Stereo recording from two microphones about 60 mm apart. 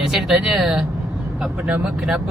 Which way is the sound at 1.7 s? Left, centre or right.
Centre.